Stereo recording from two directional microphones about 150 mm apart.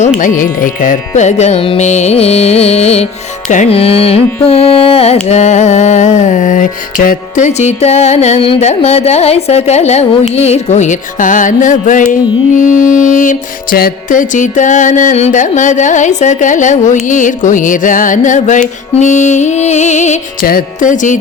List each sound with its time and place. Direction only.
0.2 s music: 60° left (ahead or behind); by 3.1 s 45° left (ahead or behind)
3.7 s carnatic music: 40° left (ahead or behind)
5.3 s music: 50° left (ahead or behind)
20.4 s music: 75° left (ahead or behind); by 21.2 s 55° left (ahead or behind)